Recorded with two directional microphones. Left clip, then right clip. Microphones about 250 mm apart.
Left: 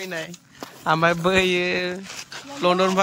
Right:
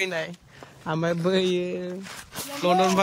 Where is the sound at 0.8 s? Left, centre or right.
Centre.